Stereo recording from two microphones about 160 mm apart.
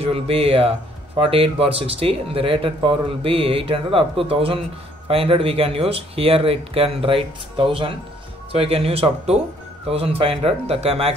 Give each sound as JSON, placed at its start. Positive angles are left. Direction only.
{"t": 0.0, "sound": "speech", "side_deg": -35}